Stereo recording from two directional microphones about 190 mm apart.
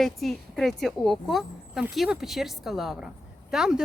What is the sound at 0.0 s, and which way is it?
A woman's voice, centre (ahead or behind).